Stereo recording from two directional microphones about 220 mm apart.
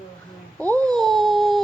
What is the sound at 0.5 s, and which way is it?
Speech, 5° left (ahead or behind).